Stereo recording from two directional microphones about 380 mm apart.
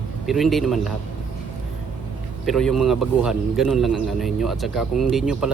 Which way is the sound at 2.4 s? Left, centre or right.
Centre.